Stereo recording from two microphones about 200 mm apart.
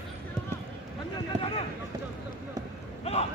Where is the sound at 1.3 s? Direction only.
35° right (ahead or behind).